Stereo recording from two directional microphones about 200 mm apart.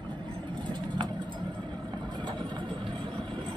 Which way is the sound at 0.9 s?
20° right (ahead or behind).